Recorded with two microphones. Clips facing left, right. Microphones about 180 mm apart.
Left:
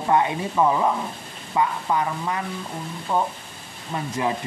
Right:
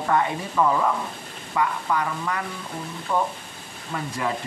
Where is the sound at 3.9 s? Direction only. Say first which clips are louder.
Left 2 dB; 20° left (ahead or behind).